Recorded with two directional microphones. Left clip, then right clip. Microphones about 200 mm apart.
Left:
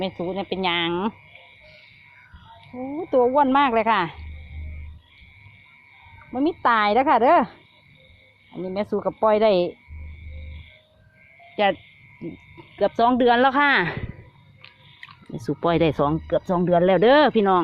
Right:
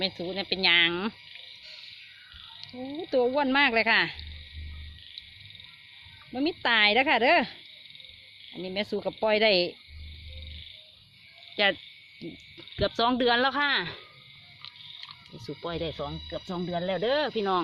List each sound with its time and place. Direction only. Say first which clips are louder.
0.3 s speech: right 1 dB; centre (ahead or behind)
3.1 s speech: left 7 dB; centre (ahead or behind)
6.4 s speech: left 4 dB; centre (ahead or behind)
8.6 s speech: left 6 dB; centre (ahead or behind)
11.5 s speech: left 4 dB; centre (ahead or behind)
12.8 s speech: left 7 dB; centre (ahead or behind); by 14.0 s 20° left (ahead or behind)
15.4 s speech: left 13 dB; 35° left (ahead or behind)
16.0 s speech: left 14 dB; 45° left (ahead or behind)
17.3 s speech: left 9 dB; 20° left (ahead or behind)